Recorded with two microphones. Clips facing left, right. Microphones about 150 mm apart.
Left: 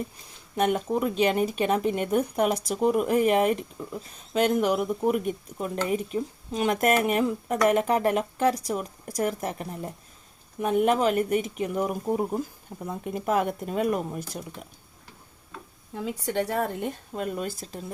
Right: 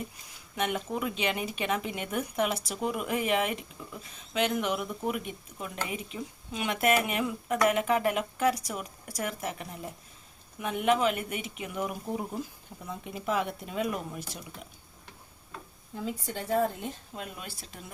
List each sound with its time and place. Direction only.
0.5 s speech: 40° left (ahead or behind)
16.2 s speech: 70° left (ahead or behind); by 17.8 s 40° left (ahead or behind)